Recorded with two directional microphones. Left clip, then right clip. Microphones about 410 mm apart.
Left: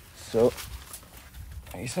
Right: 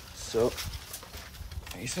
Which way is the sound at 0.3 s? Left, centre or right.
Centre.